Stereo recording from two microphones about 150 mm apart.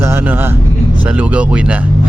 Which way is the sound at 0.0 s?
15° right (ahead or behind).